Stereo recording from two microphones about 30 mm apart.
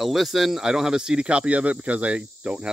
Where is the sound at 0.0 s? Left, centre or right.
Centre.